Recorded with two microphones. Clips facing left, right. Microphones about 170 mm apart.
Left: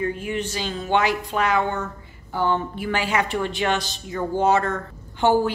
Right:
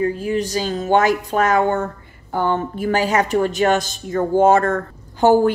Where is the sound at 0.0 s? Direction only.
35° right (ahead or behind).